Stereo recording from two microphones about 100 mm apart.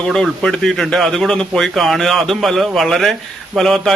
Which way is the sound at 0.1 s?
5° left (ahead or behind).